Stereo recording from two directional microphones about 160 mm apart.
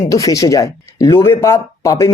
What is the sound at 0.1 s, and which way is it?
Speech, 20° left (ahead or behind).